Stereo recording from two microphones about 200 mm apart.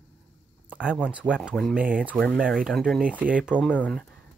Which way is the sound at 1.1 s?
5° right (ahead or behind).